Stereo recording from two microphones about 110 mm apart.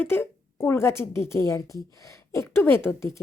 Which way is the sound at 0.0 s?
20° left (ahead or behind).